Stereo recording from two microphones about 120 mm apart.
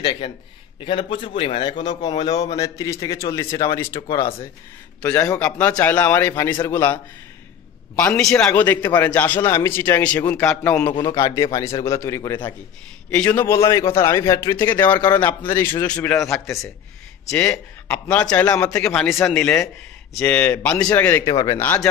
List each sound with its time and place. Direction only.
0.0 s a man's voice: 40° left (ahead or behind); by 4.3 s 25° left (ahead or behind)
5.0 s a man's voice: 10° left (ahead or behind)
8.0 s a man's voice: 10° left (ahead or behind)
10.9 s speech: 40° left (ahead or behind)
11.1 s a man's voice: 30° left (ahead or behind)
13.1 s a man's voice: 15° left (ahead or behind)
21.3 s speech: 30° left (ahead or behind)
21.5 s a man's voice: 15° left (ahead or behind)